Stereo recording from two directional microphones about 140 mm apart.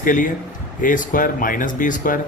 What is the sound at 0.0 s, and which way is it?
Speech, 70° left (ahead or behind).